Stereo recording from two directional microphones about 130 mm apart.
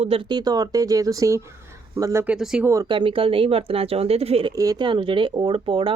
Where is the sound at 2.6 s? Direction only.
25° right (ahead or behind).